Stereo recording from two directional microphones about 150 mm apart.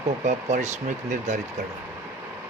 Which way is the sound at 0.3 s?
50° right (ahead or behind).